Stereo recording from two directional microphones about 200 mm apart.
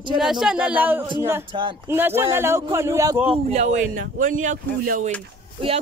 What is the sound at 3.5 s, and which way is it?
Speech, 35° right (ahead or behind).